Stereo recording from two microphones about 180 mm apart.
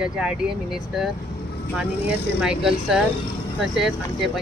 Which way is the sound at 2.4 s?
5° right (ahead or behind).